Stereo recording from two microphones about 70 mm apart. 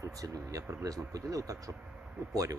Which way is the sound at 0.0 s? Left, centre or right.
Right.